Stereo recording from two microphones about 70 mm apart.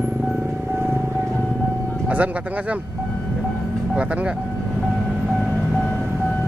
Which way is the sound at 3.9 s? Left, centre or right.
Centre.